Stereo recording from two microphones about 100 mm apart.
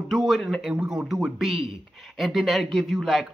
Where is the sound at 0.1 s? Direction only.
Centre (ahead or behind).